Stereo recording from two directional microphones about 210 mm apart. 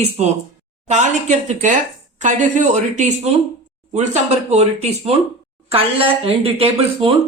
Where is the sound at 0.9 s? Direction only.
35° right (ahead or behind).